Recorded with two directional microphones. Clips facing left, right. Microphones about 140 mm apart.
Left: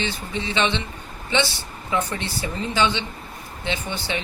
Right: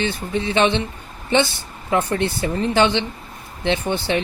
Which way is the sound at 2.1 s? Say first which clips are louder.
Right 7 dB; 55° right (ahead or behind).